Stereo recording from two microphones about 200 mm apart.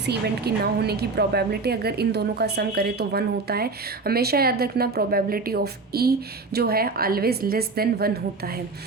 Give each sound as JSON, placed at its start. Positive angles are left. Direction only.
{"t": 0.0, "sound": "a woman's voice", "side_deg": -55}